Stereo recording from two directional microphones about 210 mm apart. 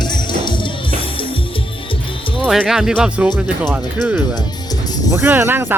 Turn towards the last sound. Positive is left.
turn(degrees=-10)  # may be behind; listen again after turning